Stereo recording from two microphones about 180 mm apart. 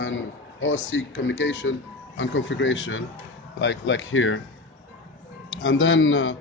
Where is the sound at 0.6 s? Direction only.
90° left.